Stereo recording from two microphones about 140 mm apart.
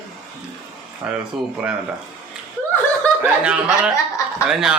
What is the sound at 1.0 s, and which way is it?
Speech, 5° right (ahead or behind).